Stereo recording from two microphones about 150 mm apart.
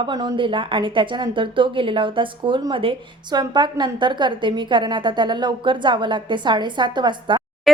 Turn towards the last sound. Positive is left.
turn(degrees=-30)  # may be behind; listen again after turning